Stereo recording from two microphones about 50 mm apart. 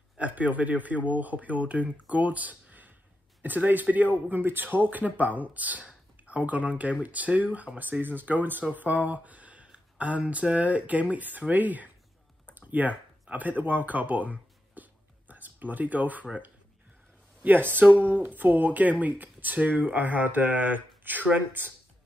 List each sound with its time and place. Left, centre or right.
0.2 s speech: right
12.5 s a sound: right
17.4 s speech: right